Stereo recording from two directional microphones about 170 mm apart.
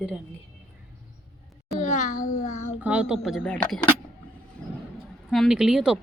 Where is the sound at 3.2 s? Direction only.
5° left (ahead or behind).